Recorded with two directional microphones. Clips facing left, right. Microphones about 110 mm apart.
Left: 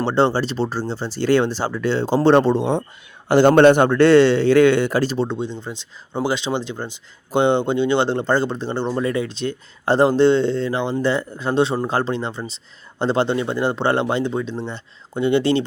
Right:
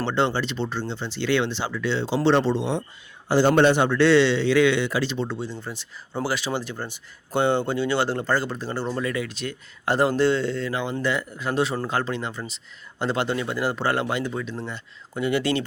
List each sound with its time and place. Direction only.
0.0 s a man's voice: 35° left (ahead or behind)